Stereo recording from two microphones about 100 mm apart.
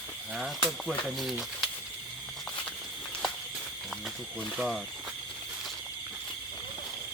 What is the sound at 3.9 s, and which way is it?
Snake, 5° left (ahead or behind).